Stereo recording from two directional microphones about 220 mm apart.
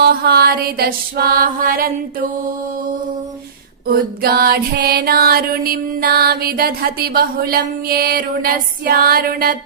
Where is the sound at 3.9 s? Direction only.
45° right (ahead or behind).